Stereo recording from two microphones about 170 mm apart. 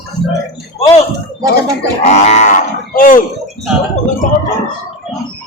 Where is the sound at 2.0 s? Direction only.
40° left (ahead or behind).